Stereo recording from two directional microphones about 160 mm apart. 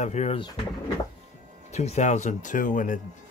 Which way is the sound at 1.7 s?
45° left (ahead or behind).